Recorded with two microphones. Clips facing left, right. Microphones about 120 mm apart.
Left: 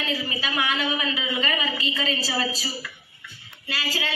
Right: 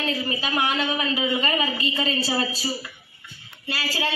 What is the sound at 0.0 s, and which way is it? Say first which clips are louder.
A woman's voice: right 2 dB; 40° right (ahead or behind).